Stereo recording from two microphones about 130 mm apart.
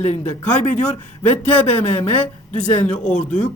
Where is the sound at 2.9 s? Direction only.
70° left (ahead or behind).